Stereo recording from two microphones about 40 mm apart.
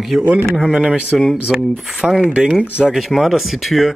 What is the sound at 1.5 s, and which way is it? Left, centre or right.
Speech, centre.